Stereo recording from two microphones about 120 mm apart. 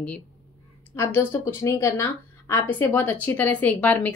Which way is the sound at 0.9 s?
20° left (ahead or behind).